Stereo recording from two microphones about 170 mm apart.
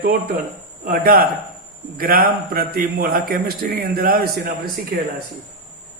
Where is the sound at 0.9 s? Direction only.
60° right (ahead or behind).